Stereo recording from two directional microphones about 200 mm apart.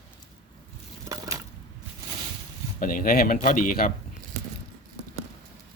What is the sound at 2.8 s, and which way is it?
Speech, 45° left (ahead or behind).